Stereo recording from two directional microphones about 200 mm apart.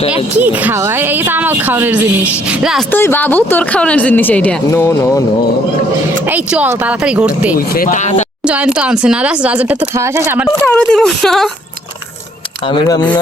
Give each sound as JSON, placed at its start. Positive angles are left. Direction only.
{"t": 0.3, "sound": "speech", "side_deg": -10}
{"t": 2.9, "sound": "speech", "side_deg": 10}
{"t": 6.2, "sound": "speech", "side_deg": -5}
{"t": 7.5, "sound": "speech", "side_deg": 45}
{"t": 8.4, "sound": "speech", "side_deg": -5}
{"t": 10.6, "sound": "speech", "side_deg": 5}
{"t": 12.6, "sound": "speech", "side_deg": 20}